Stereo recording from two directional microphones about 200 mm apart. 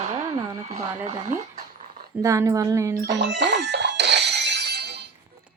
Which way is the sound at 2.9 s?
55° right (ahead or behind).